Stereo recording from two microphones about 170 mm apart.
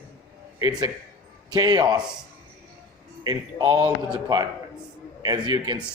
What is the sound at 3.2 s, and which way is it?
Speech, 25° right (ahead or behind).